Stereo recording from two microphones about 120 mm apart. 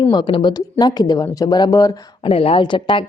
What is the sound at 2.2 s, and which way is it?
Speech, 50° left (ahead or behind).